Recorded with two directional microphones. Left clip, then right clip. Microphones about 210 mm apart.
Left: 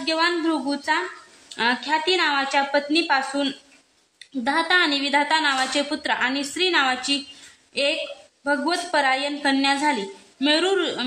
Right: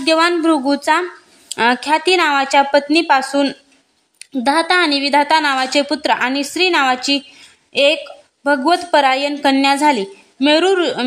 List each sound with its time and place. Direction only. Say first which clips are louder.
0.0 s a woman's voice: right 8 dB; 50° right (ahead or behind)